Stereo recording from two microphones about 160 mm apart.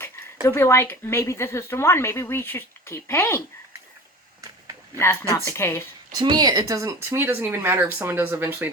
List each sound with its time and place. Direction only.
0.4 s speech: 15° left (ahead or behind)
4.9 s speech: 20° left (ahead or behind)
6.1 s speech: 25° right (ahead or behind)